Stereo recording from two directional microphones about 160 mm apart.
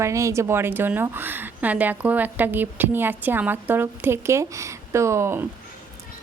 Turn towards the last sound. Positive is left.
turn(degrees=-15)  # may be behind; listen again after turning